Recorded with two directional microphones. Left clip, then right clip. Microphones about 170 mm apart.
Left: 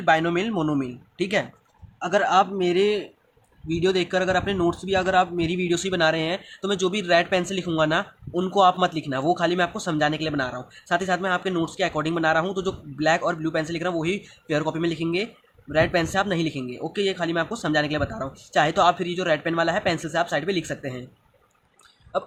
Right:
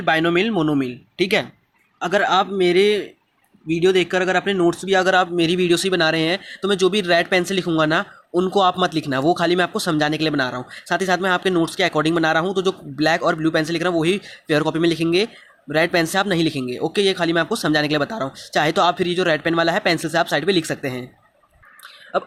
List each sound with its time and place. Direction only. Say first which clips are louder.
0.0 s speech: right 3 dB; 30° right (ahead or behind)